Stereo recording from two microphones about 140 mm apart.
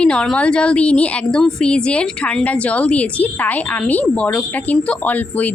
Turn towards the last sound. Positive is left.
turn(degrees=10)  # may be behind; listen again after turning